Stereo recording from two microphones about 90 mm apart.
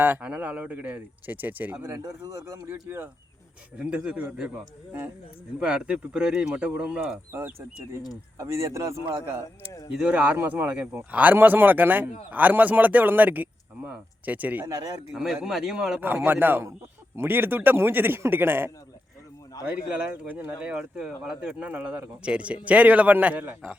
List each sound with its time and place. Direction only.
0.0 s speech: 15° right (ahead or behind)
3.8 s speech: 15° right (ahead or behind)
5.5 s speech: 10° right (ahead or behind)
8.4 s speech: 35° right (ahead or behind)
9.9 s speech: 10° right (ahead or behind)
10.3 s speech: 20° right (ahead or behind)
15.1 s speech: 5° right (ahead or behind)
16.0 s speech: 20° right (ahead or behind)
19.6 s speech: 15° right (ahead or behind)